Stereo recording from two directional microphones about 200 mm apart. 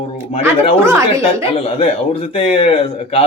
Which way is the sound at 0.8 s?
15° right (ahead or behind).